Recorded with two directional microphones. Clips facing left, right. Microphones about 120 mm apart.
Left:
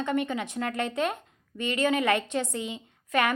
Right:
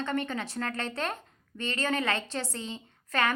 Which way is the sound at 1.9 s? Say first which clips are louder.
Left 5 dB; 15° left (ahead or behind).